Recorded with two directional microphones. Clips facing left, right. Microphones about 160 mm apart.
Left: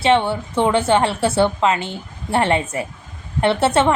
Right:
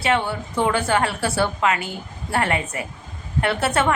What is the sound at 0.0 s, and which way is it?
A woman's voice, 25° left (ahead or behind).